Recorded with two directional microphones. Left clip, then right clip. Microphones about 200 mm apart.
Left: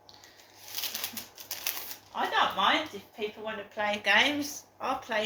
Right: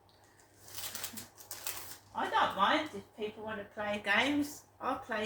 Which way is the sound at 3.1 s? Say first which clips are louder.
Left 5 dB; 10° right (ahead or behind).